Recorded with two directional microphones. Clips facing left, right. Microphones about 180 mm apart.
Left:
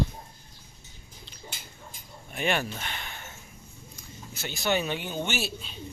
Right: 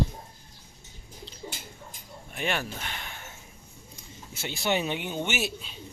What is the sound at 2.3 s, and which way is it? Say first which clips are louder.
Speech: left 3 dB; centre (ahead or behind).